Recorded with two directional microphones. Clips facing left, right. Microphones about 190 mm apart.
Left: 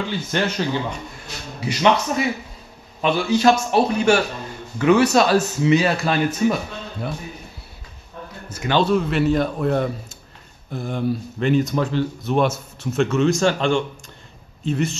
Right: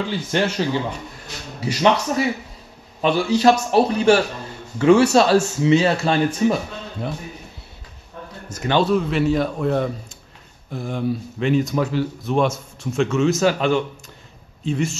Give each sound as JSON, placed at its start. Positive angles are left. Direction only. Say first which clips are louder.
{"t": 0.1, "sound": "a man's voice", "louder": "right 2 dB", "side_deg": -35}
{"t": 8.8, "sound": "speech", "louder": "even", "side_deg": 0}
{"t": 12.3, "sound": "a man's voice", "louder": "even", "side_deg": 0}